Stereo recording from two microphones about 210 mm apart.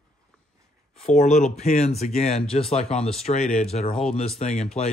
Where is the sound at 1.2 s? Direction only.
35° left (ahead or behind).